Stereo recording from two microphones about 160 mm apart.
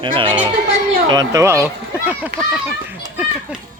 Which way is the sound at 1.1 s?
25° right (ahead or behind).